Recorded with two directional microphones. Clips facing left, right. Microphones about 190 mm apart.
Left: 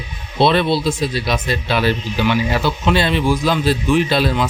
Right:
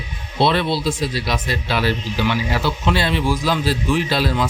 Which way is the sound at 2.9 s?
20° left (ahead or behind).